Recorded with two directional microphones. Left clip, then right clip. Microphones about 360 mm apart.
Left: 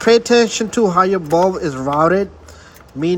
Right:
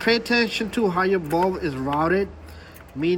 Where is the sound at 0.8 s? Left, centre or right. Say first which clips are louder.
Left 8 dB; centre.